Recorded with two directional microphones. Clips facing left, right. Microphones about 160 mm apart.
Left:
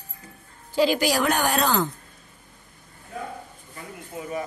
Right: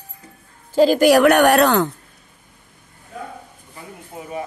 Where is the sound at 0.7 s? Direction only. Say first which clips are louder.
Right 9 dB; 45° right (ahead or behind); by 1.9 s 70° right (ahead or behind).